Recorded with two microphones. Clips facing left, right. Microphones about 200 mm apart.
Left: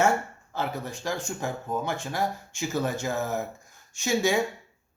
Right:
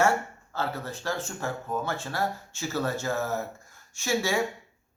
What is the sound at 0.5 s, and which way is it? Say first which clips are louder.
Speech: left 1 dB; 15° left (ahead or behind).